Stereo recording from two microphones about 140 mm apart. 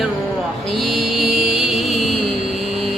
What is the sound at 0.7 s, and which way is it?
Mantra, centre (ahead or behind).